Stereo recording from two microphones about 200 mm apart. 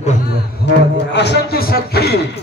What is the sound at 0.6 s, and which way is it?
Speech, 60° left (ahead or behind).